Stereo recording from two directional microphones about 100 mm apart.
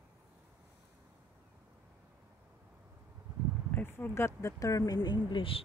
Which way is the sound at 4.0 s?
25° left (ahead or behind).